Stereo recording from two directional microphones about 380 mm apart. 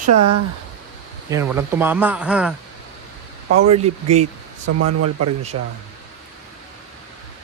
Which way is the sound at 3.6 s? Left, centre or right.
Centre.